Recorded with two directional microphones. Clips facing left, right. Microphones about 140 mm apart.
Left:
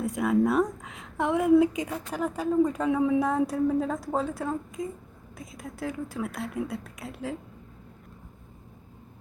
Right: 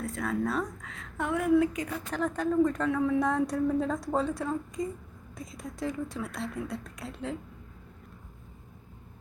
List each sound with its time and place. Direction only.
0.0 s a woman's voice: 15° left (ahead or behind)
3.2 s speech: 5° left (ahead or behind)